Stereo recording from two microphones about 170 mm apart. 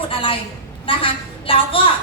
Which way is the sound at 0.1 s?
30° left (ahead or behind).